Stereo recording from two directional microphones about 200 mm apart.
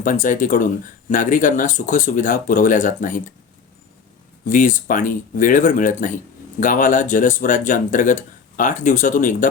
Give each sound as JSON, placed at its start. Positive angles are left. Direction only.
{"t": 0.0, "sound": "speech", "side_deg": 40}
{"t": 4.4, "sound": "speech", "side_deg": 40}